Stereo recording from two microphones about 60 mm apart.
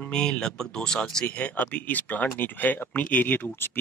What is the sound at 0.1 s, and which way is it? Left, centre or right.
Speech, centre.